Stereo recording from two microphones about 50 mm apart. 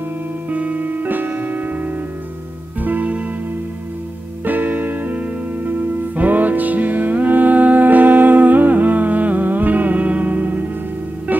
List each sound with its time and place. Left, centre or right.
0.5 s music: right
2.8 s music: right
4.5 s music: right